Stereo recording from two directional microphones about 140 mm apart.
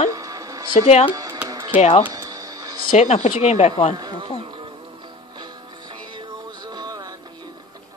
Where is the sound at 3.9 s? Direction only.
30° right (ahead or behind).